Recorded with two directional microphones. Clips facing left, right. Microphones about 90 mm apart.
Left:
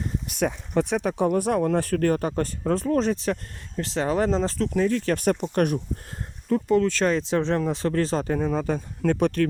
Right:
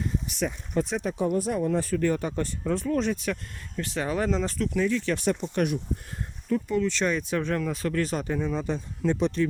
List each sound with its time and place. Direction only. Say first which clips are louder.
0.3 s speech: left 5 dB; 75° left (ahead or behind); by 7.2 s 45° left (ahead or behind)
7.2 s speech: left 4 dB; 30° left (ahead or behind); by 9.5 s 55° left (ahead or behind)